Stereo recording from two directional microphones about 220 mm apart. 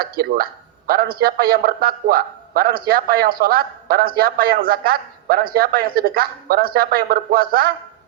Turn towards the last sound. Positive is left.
turn(degrees=-40)  # may be behind; listen again after turning